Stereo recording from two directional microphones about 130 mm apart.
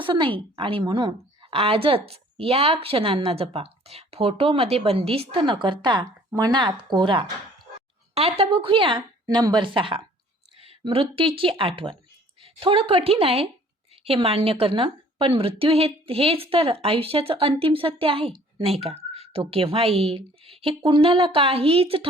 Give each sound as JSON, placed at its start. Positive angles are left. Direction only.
{"t": 0.0, "sound": "a woman's voice", "side_deg": -40}
{"t": 8.1, "sound": "a woman's voice", "side_deg": -50}
{"t": 9.2, "sound": "a woman's voice", "side_deg": -30}